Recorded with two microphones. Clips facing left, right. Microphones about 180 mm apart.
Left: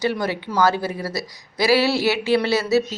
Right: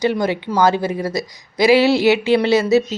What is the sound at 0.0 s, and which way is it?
A woman's voice, 20° right (ahead or behind).